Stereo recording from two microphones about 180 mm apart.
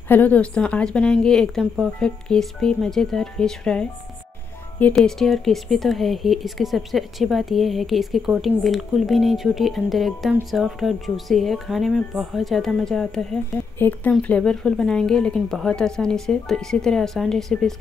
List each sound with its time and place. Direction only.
0.1 s speech: 10° left (ahead or behind)